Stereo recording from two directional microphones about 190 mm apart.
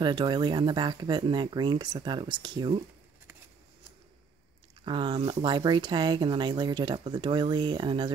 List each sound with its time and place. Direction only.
0.0 s speech: 25° right (ahead or behind)
4.8 s speech: 25° right (ahead or behind)